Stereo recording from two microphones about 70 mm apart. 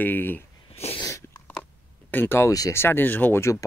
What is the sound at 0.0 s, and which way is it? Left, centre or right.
Speech, left.